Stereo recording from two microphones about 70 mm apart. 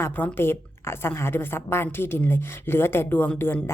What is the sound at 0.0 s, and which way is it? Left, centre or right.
A woman's voice, left.